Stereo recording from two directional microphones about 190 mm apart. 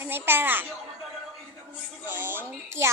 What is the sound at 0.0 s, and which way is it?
Speech, 10° right (ahead or behind).